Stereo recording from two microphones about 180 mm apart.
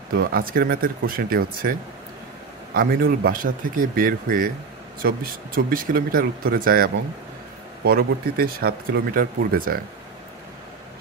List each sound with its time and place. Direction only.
0.1 s speech: 55° right (ahead or behind)